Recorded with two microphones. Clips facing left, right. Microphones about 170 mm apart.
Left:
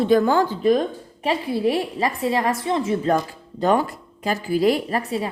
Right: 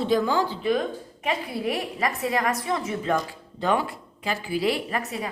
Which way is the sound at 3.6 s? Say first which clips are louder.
Left 5 dB; 45° left (ahead or behind).